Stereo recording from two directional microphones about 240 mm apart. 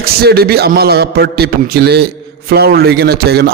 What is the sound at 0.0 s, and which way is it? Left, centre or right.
A man's voice, right.